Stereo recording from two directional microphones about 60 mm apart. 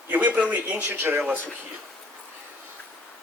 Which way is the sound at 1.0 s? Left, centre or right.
Right.